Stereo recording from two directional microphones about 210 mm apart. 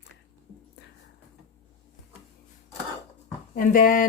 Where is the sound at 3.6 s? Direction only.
40° left (ahead or behind).